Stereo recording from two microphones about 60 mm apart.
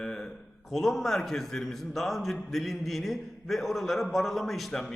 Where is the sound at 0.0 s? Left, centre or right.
Centre.